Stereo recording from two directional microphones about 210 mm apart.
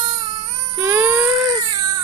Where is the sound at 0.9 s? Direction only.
10° right (ahead or behind).